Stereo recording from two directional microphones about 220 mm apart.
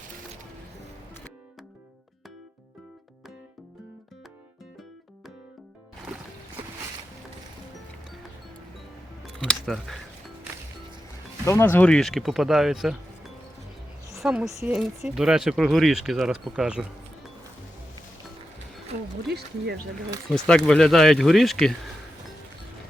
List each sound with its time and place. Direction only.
9.6 s speech: centre (ahead or behind)
11.4 s speech: 10° left (ahead or behind)
18.9 s speech: 45° right (ahead or behind)
20.3 s speech: 5° left (ahead or behind)